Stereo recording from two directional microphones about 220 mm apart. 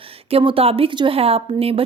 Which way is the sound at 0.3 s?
25° right (ahead or behind).